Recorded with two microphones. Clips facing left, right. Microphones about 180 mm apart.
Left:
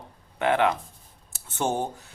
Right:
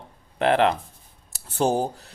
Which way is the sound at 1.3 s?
35° right (ahead or behind).